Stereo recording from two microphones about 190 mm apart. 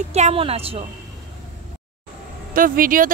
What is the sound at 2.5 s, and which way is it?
Speech, 45° right (ahead or behind).